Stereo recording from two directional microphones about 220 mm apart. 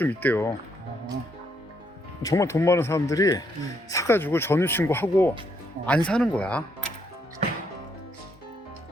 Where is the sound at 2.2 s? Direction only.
15° left (ahead or behind).